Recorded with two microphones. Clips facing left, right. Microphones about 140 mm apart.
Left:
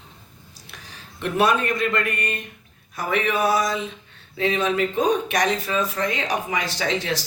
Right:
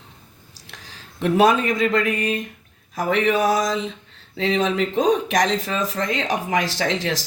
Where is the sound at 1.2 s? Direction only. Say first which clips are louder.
Right 4 dB; 90° right.